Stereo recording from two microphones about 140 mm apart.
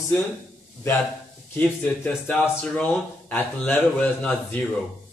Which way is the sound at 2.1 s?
5° left (ahead or behind).